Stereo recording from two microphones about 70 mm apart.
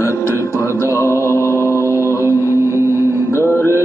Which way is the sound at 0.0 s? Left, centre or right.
Left.